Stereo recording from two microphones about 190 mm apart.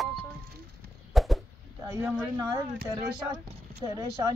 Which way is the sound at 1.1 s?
Centre (ahead or behind).